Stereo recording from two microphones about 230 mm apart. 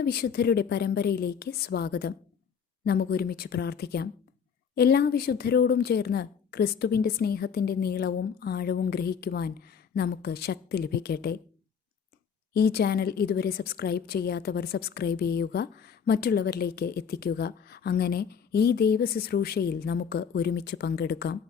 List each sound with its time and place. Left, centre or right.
0.0 s a woman's voice: left
12.5 s a woman's voice: left